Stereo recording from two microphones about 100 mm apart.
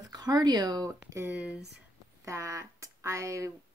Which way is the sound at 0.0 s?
40° right (ahead or behind).